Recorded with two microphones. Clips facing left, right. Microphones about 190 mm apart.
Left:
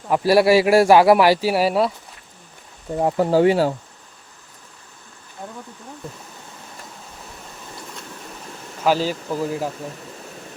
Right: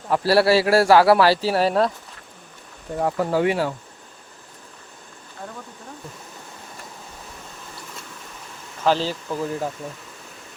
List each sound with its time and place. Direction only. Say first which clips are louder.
0.1 s a man's voice: left 2 dB; 15° left (ahead or behind)
3.0 s speech: left 4 dB; 25° left (ahead or behind)
8.8 s a man's voice: left 1 dB; 10° left (ahead or behind)